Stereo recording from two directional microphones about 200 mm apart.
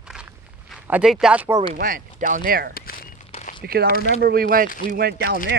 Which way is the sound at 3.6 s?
50° right (ahead or behind).